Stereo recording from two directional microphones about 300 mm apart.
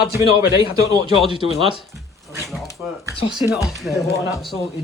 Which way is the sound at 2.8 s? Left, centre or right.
Centre.